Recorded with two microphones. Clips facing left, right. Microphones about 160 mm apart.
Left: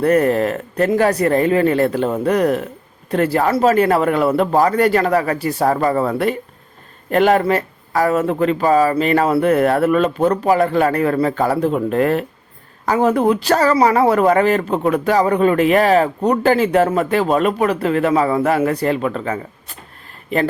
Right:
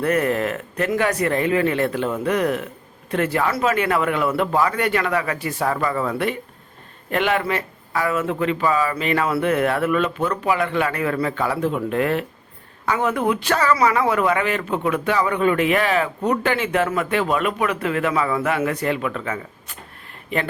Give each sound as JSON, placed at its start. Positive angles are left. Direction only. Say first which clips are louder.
{"t": 0.0, "sound": "speech", "louder": "left 6 dB", "side_deg": 35}